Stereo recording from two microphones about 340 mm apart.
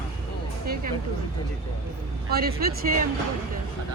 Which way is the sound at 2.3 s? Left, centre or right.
Right.